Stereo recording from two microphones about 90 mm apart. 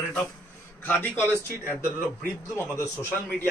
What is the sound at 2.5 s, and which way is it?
Speech, 30° left (ahead or behind).